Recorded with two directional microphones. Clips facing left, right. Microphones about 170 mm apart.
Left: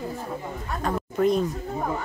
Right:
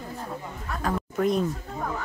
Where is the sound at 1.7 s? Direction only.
20° left (ahead or behind).